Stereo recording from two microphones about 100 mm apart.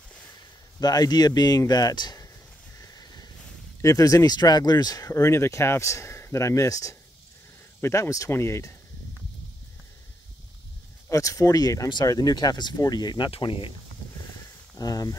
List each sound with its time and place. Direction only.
0.7 s speech: 40° left (ahead or behind)
2.8 s a sound: 40° left (ahead or behind)
3.8 s speech: 35° left (ahead or behind)
11.1 s speech: 30° left (ahead or behind)
13.3 s speech: 60° left (ahead or behind)
14.8 s speech: 40° left (ahead or behind)